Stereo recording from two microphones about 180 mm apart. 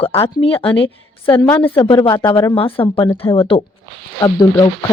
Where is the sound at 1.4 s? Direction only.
10° left (ahead or behind).